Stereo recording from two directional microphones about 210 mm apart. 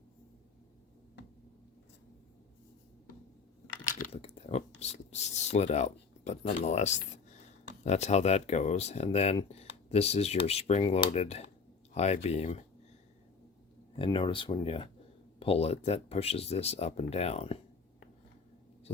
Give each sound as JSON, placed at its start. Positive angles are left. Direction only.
{"t": 4.1, "sound": "a sound", "side_deg": 30}
{"t": 4.8, "sound": "speech", "side_deg": 30}
{"t": 13.9, "sound": "speech", "side_deg": 25}